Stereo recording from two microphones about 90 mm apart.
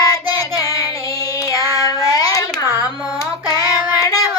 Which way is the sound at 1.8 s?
40° left (ahead or behind).